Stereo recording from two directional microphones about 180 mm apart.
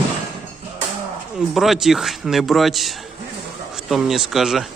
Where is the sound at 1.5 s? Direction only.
Centre (ahead or behind).